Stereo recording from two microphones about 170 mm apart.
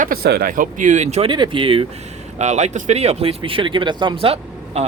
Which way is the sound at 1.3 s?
30° right (ahead or behind).